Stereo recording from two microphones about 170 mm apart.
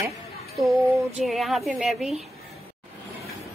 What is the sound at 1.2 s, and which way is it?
Speech, centre (ahead or behind).